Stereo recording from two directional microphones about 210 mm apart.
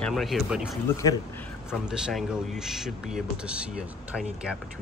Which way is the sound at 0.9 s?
15° left (ahead or behind).